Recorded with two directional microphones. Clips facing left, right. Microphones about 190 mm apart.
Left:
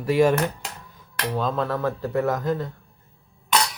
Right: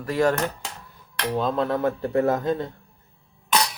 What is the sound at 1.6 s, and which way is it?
Speech, 20° right (ahead or behind).